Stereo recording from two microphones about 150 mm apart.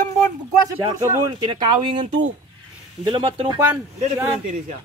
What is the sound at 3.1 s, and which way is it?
Speech, 35° right (ahead or behind).